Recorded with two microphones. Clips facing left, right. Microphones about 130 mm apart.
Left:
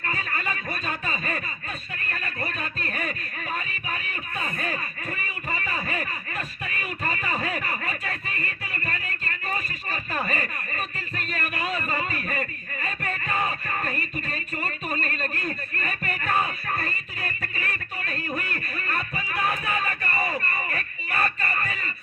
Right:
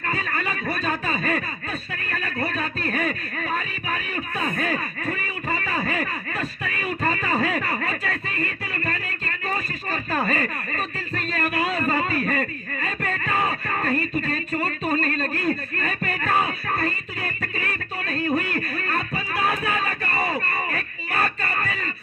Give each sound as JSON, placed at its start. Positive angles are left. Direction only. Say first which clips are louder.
{"t": 0.1, "sound": "music", "louder": "right 4 dB", "side_deg": -30}
{"t": 2.0, "sound": "speech", "louder": "right 5 dB", "side_deg": -35}
{"t": 8.4, "sound": "music", "louder": "right 5 dB", "side_deg": -30}